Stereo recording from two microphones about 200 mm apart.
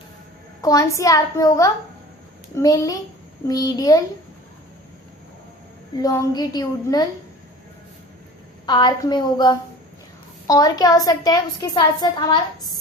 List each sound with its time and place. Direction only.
0.6 s a woman's voice: 15° left (ahead or behind)
6.0 s a woman's voice: 20° left (ahead or behind)
8.6 s a woman's voice: 20° left (ahead or behind)